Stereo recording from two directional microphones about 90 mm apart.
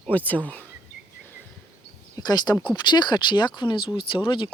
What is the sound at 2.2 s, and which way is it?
Speech, 50° left (ahead or behind).